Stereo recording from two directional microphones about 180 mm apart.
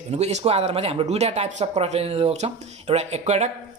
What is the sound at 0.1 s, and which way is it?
Speech, 35° right (ahead or behind).